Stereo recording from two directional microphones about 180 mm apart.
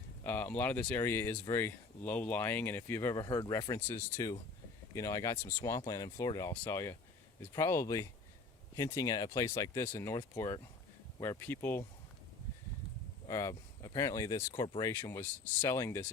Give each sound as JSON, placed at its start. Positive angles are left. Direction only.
{"t": 0.3, "sound": "speech", "side_deg": 10}
{"t": 13.2, "sound": "speech", "side_deg": 20}